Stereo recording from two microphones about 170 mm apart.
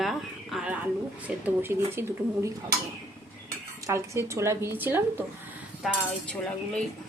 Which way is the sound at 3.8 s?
15° right (ahead or behind).